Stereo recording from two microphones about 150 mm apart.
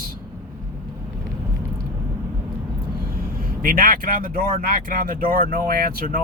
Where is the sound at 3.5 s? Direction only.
70° right (ahead or behind).